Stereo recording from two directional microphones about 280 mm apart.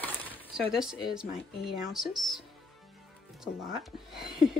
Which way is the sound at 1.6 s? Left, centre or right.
Centre.